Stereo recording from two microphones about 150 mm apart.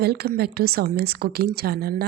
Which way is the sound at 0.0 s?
90° right.